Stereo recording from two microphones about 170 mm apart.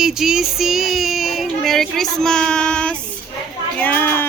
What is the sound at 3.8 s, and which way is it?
Speech, 10° left (ahead or behind).